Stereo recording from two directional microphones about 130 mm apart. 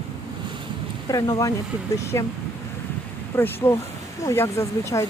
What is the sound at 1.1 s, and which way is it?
Speech, 25° left (ahead or behind).